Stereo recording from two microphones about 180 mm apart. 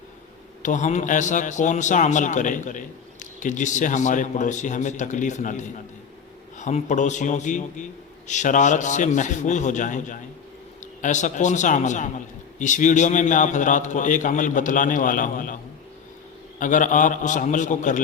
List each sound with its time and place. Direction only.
0.6 s a man's voice: 45° left (ahead or behind)
16.6 s a man's voice: 45° left (ahead or behind)